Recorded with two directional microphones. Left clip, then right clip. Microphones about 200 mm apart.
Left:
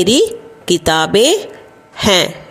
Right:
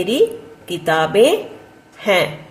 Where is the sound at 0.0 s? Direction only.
45° left (ahead or behind).